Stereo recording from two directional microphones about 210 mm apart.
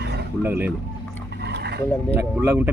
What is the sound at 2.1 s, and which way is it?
Speech, 10° right (ahead or behind).